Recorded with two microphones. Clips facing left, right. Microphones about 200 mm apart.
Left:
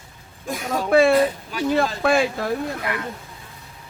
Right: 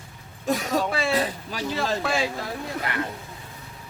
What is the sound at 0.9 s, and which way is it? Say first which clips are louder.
Speech: left 9 dB; 55° left (ahead or behind).